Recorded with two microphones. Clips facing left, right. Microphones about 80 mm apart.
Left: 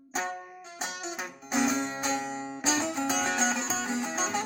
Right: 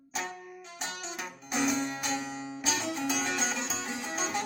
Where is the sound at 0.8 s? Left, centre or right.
Left.